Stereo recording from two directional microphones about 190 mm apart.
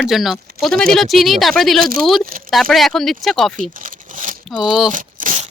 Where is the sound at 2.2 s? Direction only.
50° right (ahead or behind).